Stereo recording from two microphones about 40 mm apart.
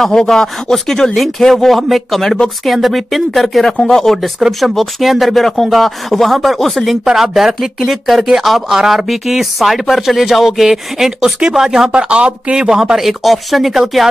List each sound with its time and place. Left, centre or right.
0.0 s speech: centre
3.7 s speech: centre
7.1 s speech: centre
11.9 s speech: right
12.6 s speech: centre
13.2 s speech: centre